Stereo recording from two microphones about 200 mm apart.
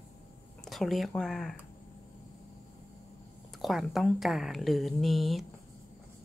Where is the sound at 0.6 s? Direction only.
Centre (ahead or behind).